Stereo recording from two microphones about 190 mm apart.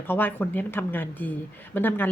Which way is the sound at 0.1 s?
10° left (ahead or behind).